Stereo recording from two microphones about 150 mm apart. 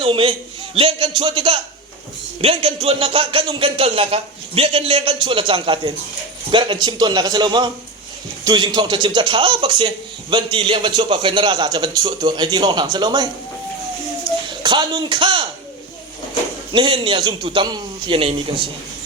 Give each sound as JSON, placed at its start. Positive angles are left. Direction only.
{"t": 0.0, "sound": "a man's voice", "side_deg": -40}
{"t": 14.6, "sound": "a man's voice", "side_deg": -30}
{"t": 16.7, "sound": "a man's voice", "side_deg": -35}